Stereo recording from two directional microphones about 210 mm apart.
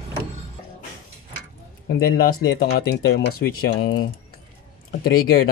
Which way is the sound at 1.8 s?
45° left (ahead or behind).